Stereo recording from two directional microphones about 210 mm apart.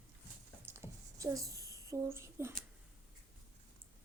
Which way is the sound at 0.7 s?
10° right (ahead or behind).